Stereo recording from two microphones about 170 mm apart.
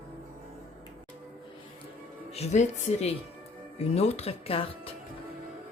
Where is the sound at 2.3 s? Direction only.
40° left (ahead or behind).